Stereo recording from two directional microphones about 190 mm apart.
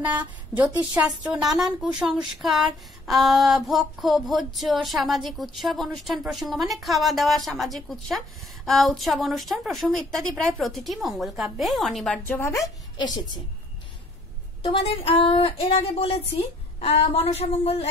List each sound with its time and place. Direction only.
0.9 s female singing: 5° right (ahead or behind); by 13.4 s 25° left (ahead or behind)
14.6 s speech: 30° left (ahead or behind)